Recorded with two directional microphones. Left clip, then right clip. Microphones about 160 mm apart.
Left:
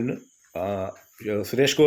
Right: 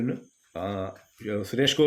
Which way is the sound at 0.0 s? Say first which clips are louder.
Left 2 dB; 25° left (ahead or behind).